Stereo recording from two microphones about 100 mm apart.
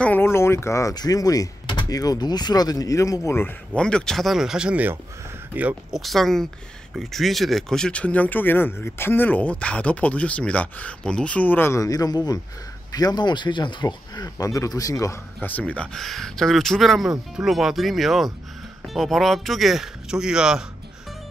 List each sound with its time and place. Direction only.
0.0 s speech: 20° left (ahead or behind)
3.7 s speech: 10° left (ahead or behind); by 5.9 s 15° right (ahead or behind)
5.9 s speech: centre (ahead or behind); by 15.1 s 35° left (ahead or behind)
15.4 s speech: 15° left (ahead or behind); by 20.6 s 5° right (ahead or behind)